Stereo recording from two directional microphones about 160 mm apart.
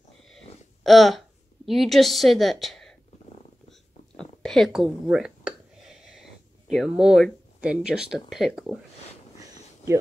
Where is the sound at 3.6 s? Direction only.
5° left (ahead or behind).